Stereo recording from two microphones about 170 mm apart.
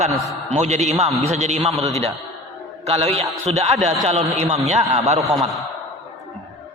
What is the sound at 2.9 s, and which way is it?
A man's voice, 35° right (ahead or behind).